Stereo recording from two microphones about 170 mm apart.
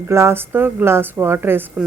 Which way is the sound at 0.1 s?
15° right (ahead or behind).